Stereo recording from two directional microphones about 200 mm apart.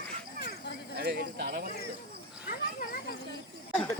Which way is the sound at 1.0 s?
55° right (ahead or behind).